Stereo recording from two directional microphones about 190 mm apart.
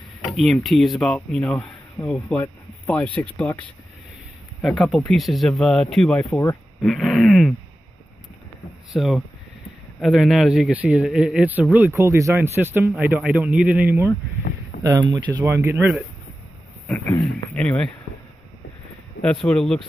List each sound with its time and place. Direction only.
0.3 s speech: centre (ahead or behind)
4.6 s speech: 5° left (ahead or behind)
8.9 s speech: 5° right (ahead or behind)
14.9 s speech: 20° right (ahead or behind)
17.6 s speech: 5° left (ahead or behind)
19.2 s speech: 5° left (ahead or behind)